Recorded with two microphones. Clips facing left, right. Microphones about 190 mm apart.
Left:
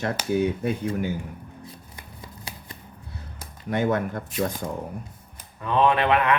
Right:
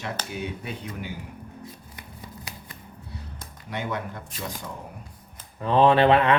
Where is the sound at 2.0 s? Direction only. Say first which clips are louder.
Right 1 dB; 30° left (ahead or behind).